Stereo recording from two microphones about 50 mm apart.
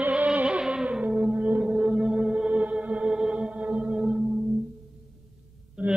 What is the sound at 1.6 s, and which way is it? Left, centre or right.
Music, centre.